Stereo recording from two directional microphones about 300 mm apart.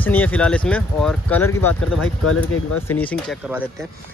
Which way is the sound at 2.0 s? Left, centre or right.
Left.